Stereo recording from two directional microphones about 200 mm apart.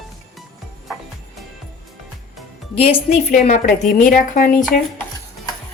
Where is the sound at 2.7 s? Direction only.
30° left (ahead or behind).